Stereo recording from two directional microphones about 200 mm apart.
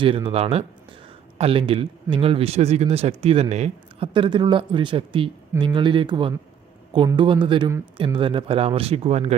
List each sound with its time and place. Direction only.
0.0 s speech: 25° right (ahead or behind)